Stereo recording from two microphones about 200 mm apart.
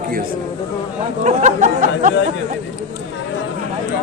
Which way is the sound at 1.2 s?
40° right (ahead or behind).